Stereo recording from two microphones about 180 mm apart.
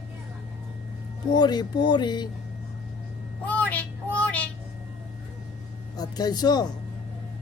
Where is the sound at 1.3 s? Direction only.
25° left (ahead or behind).